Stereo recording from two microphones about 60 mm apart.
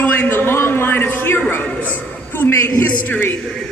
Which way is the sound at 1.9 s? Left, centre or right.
Left.